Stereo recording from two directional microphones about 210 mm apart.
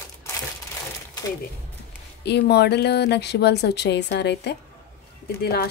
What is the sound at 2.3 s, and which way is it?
Speech, 50° left (ahead or behind).